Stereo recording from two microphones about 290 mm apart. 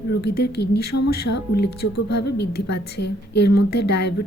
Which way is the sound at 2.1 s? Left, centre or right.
Left.